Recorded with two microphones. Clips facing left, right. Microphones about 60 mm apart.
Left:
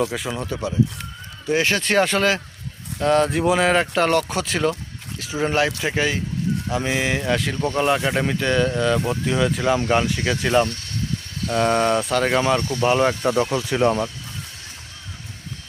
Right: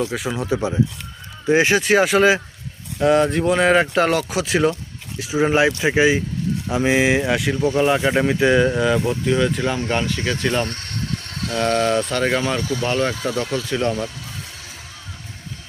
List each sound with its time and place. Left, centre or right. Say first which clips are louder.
0.1 s speech: right 2 dB; centre
0.4 s speech: right 3 dB; centre
9.0 s speech: right 2 dB; centre
10.7 s a sound: right 1 dB; right
11.2 s mechanisms: even; right
11.5 s speech: even; centre
12.8 s speech: left 4 dB; centre